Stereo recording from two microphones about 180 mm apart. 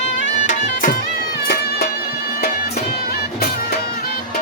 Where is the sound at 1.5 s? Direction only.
60° left (ahead or behind).